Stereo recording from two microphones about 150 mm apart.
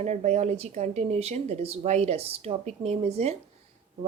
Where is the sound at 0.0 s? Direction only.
50° right (ahead or behind).